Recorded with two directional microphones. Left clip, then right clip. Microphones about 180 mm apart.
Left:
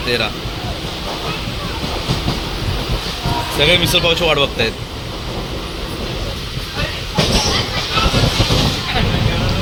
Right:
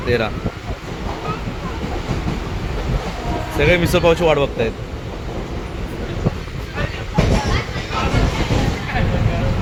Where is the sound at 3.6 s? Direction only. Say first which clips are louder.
Left 2 dB; 25° right (ahead or behind).